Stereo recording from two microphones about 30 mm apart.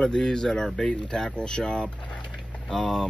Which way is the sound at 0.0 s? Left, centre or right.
Left.